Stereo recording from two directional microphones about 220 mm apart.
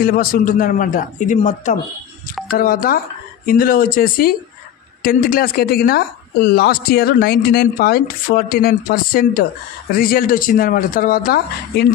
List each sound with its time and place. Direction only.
0.0 s a man's voice: 40° left (ahead or behind)